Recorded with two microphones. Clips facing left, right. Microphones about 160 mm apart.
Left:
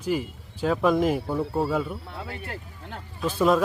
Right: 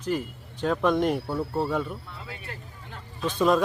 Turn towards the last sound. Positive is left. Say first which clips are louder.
# left 1 dB
turn(degrees=5)  # may be behind; listen again after turning